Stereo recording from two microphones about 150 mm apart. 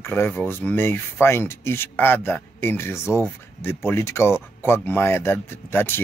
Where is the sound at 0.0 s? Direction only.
15° left (ahead or behind).